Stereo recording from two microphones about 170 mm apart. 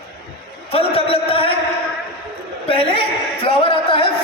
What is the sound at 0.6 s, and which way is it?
Speech, 35° left (ahead or behind).